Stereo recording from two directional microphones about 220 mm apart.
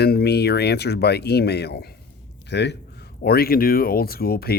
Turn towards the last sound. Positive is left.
turn(degrees=45)  # may be behind; listen again after turning